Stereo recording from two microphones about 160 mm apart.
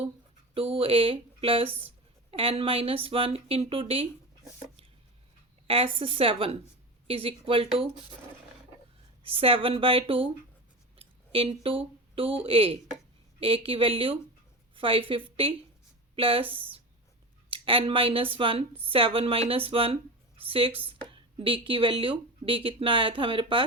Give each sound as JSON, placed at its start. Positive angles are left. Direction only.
{"t": 0.5, "sound": "speech", "side_deg": -35}
{"t": 5.6, "sound": "speech", "side_deg": -35}
{"t": 9.2, "sound": "speech", "side_deg": -35}